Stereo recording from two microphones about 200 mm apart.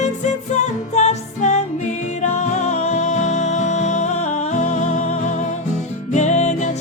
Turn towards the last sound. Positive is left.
turn(degrees=35)  # may be behind; listen again after turning